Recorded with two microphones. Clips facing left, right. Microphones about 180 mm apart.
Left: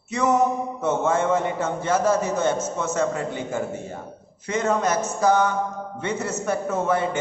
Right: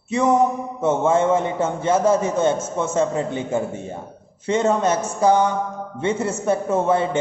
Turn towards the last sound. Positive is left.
turn(degrees=-25)  # may be behind; listen again after turning